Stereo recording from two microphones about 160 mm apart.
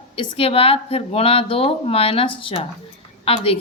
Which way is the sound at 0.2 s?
35° left (ahead or behind).